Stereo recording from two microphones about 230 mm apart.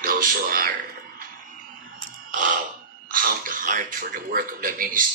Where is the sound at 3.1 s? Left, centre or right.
Right.